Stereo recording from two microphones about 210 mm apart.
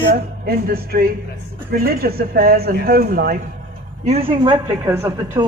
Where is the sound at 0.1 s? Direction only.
45° right (ahead or behind).